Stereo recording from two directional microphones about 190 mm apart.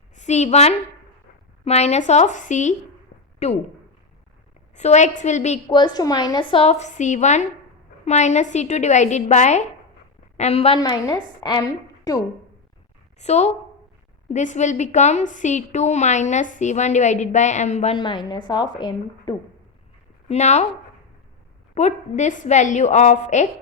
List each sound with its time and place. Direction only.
0.2 s a woman's voice: 35° left (ahead or behind)
4.7 s a woman's voice: 35° left (ahead or behind)
5.6 s a woman's voice: 20° left (ahead or behind)
10.8 s a woman's voice: 20° left (ahead or behind)
13.1 s a woman's voice: 35° left (ahead or behind)
17.9 s a woman's voice: 25° left (ahead or behind)
20.2 s a woman's voice: 35° left (ahead or behind)
21.8 s a woman's voice: 40° left (ahead or behind)